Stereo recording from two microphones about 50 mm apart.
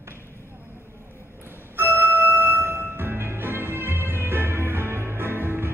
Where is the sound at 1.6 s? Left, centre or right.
Right.